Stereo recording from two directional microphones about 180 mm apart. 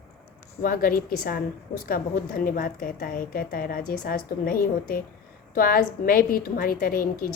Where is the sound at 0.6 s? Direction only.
50° left (ahead or behind).